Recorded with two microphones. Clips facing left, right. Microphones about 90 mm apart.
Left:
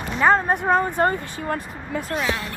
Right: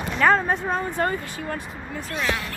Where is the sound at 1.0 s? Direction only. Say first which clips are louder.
Left 4 dB; 40° left (ahead or behind).